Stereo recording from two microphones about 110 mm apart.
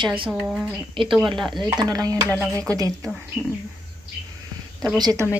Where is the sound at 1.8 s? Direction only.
35° right (ahead or behind).